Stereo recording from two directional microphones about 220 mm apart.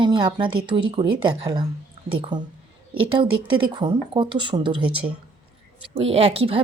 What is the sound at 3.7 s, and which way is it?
A woman's voice, 20° right (ahead or behind).